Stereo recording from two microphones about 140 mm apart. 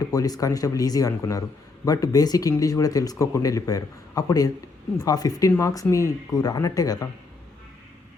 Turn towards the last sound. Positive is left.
turn(degrees=25)  # may be behind; listen again after turning